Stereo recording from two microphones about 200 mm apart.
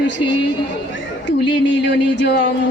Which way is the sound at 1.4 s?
55° left (ahead or behind).